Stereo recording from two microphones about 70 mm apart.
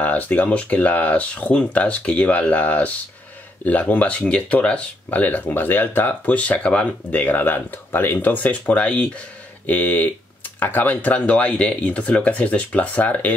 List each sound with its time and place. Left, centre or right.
0.0 s speech: left